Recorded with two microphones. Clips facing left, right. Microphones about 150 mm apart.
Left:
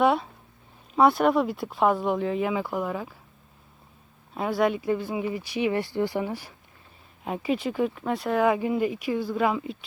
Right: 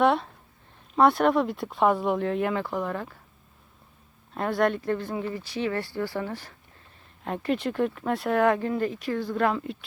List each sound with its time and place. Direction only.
0.0 s speech: 5° left (ahead or behind)
4.4 s speech: 5° left (ahead or behind)